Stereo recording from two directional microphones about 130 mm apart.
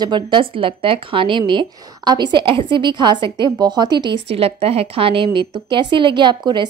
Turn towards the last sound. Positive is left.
turn(degrees=-35)  # may be behind; listen again after turning